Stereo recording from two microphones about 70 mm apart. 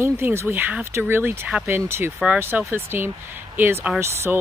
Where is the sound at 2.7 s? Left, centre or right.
Right.